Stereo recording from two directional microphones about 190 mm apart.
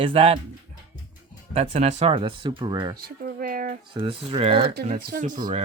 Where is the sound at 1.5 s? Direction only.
30° right (ahead or behind).